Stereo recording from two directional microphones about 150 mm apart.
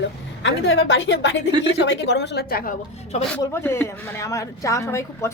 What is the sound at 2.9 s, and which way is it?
Speech, 45° left (ahead or behind).